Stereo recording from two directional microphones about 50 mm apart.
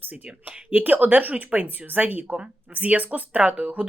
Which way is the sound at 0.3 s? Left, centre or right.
Right.